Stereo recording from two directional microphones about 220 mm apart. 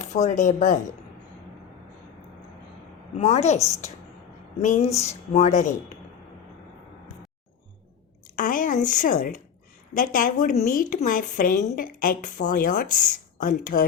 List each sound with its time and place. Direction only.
0.0 s a woman's voice: 30° left (ahead or behind)
3.2 s a woman's voice: 30° left (ahead or behind)
8.4 s a woman's voice: 35° left (ahead or behind)